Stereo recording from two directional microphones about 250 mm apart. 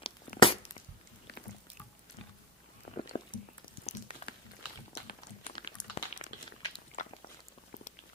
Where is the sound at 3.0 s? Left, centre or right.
Left.